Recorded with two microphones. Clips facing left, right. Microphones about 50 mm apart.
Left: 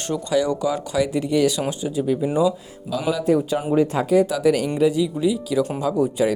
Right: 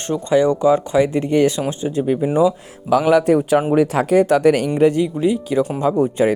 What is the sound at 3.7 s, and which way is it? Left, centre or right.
Speech, right.